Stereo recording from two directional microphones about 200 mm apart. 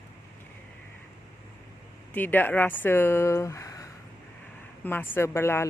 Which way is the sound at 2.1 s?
10° left (ahead or behind).